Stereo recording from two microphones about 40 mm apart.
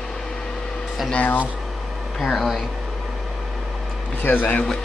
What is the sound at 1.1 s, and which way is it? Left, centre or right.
Speech, left.